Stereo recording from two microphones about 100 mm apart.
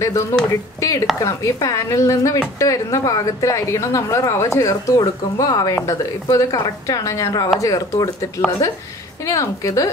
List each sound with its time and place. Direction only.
0.0 s a woman's voice: 30° left (ahead or behind)